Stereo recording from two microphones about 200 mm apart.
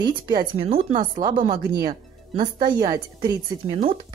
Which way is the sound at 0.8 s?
40° right (ahead or behind).